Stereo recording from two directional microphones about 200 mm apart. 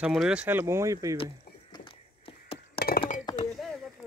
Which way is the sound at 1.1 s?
25° left (ahead or behind).